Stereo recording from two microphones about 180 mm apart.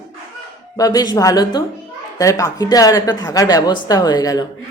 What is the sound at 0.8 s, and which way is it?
Speech, 20° left (ahead or behind).